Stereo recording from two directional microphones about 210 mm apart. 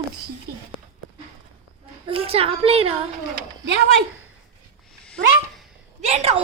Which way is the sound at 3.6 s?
55° right (ahead or behind).